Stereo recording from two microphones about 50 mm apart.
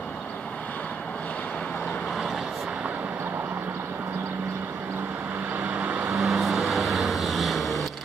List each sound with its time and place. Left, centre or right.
5.6 s vehicle: right
6.0 s vehicle: centre